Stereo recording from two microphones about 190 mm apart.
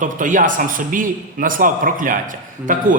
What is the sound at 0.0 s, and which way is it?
A man's voice, 45° right (ahead or behind).